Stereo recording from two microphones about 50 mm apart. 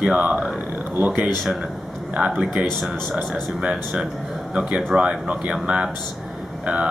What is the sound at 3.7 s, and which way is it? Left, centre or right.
Speech, centre.